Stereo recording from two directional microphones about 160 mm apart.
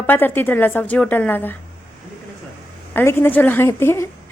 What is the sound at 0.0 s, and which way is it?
A woman's voice, 10° left (ahead or behind).